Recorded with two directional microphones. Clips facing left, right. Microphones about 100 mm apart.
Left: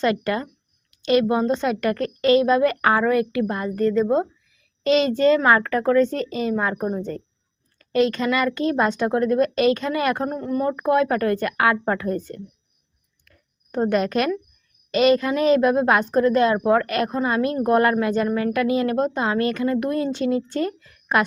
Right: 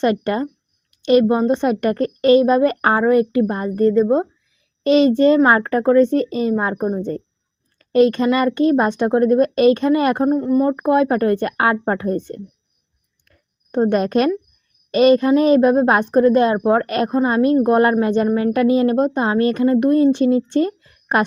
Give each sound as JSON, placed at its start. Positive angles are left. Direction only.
{"t": 0.0, "sound": "a woman's voice", "side_deg": -25}
{"t": 5.3, "sound": "a woman's voice", "side_deg": -30}
{"t": 13.2, "sound": "a sound", "side_deg": -25}
{"t": 14.8, "sound": "a woman's voice", "side_deg": -30}